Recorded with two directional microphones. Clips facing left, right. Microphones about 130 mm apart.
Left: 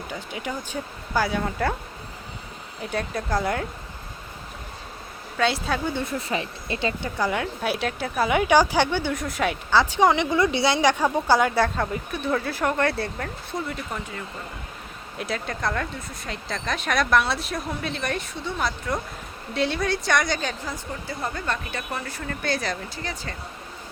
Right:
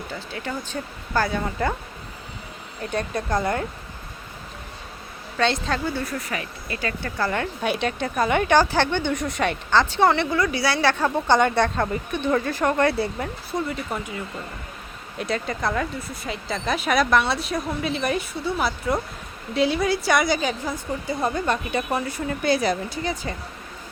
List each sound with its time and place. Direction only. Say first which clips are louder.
0.1 s a woman's voice: even; 15° left (ahead or behind)
1.4 s speech: even; centre (ahead or behind)
2.8 s speech: right 2 dB; 5° left (ahead or behind)
5.4 s a woman's voice: right 1 dB; 5° left (ahead or behind)
5.9 s speech: left 1 dB; 20° left (ahead or behind)
7.3 s a woman's voice: right 2 dB; 5° left (ahead or behind)
15.2 s a woman's voice: right 3 dB; centre (ahead or behind)